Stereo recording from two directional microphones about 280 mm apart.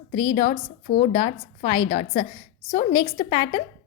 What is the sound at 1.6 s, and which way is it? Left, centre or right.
Speech, left.